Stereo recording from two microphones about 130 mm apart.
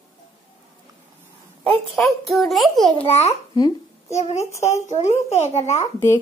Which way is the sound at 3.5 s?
30° left (ahead or behind).